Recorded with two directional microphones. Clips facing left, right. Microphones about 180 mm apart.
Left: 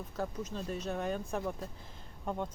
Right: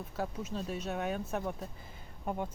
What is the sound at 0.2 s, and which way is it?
Speech, 5° right (ahead or behind).